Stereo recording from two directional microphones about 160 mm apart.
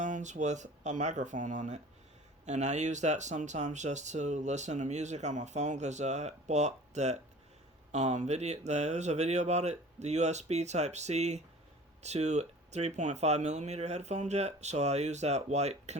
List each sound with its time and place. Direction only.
0.0 s speech: 50° right (ahead or behind)